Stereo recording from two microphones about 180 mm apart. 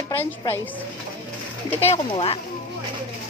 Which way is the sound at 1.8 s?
35° left (ahead or behind).